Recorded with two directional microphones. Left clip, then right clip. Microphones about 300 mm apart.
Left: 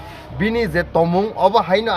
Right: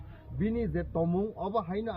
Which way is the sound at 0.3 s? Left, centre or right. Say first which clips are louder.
Left 14 dB; left.